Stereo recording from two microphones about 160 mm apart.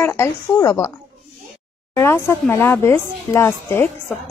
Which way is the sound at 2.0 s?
15° left (ahead or behind).